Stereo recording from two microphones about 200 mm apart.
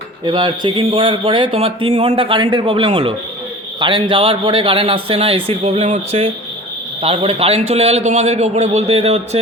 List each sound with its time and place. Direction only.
0.3 s a man's voice: 25° right (ahead or behind)